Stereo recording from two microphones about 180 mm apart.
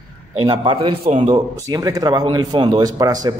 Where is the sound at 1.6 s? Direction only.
20° right (ahead or behind).